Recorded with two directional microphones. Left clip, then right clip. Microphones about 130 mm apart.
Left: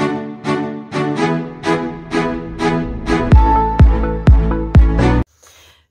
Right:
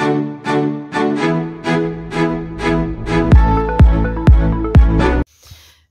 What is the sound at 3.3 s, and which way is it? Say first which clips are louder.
Music: left 3 dB; centre (ahead or behind).